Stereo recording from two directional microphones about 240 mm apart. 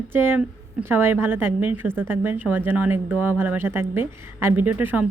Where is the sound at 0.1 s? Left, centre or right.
Centre.